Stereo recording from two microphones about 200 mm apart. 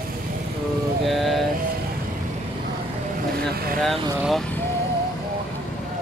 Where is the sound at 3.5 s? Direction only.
50° right (ahead or behind).